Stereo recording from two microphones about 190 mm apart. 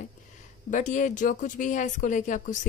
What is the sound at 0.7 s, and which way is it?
Speech, 40° left (ahead or behind).